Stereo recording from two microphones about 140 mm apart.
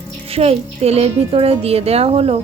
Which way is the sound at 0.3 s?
45° right (ahead or behind).